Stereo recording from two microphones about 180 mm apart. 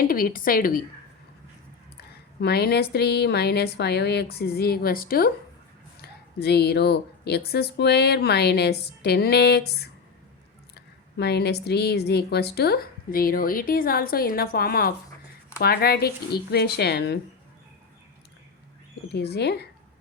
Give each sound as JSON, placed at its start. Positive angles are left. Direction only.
{"t": 0.0, "sound": "speech", "side_deg": 50}
{"t": 2.0, "sound": "speech", "side_deg": 60}
{"t": 11.2, "sound": "speech", "side_deg": 65}
{"t": 19.1, "sound": "speech", "side_deg": 65}